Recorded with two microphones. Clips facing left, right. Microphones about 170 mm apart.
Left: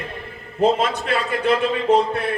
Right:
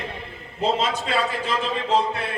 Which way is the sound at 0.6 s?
55° left (ahead or behind).